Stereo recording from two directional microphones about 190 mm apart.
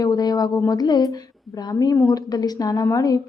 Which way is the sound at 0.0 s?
20° left (ahead or behind).